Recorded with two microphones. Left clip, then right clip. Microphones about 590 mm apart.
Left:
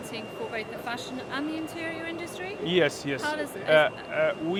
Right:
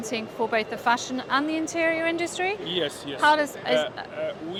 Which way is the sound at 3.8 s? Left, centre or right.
Left.